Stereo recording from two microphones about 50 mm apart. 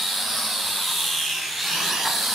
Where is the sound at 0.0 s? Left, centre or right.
Centre.